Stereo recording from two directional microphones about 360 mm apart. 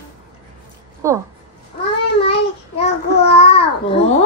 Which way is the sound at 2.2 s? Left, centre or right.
Centre.